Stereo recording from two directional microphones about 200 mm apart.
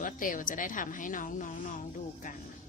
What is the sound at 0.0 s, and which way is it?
Speech, 40° left (ahead or behind).